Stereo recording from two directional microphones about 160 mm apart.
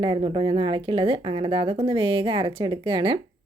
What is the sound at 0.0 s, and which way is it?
A woman's voice, 30° right (ahead or behind).